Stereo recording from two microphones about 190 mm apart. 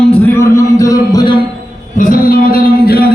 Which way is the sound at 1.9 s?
45° left (ahead or behind).